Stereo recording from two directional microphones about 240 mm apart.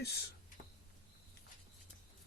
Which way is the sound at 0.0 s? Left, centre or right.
Left.